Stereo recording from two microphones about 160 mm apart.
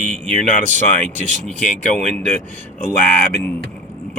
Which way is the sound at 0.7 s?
50° right (ahead or behind).